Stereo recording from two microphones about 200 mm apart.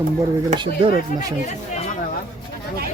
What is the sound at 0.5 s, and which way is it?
Speech, 25° right (ahead or behind).